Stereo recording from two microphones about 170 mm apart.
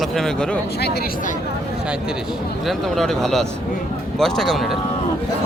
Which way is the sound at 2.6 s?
Centre (ahead or behind).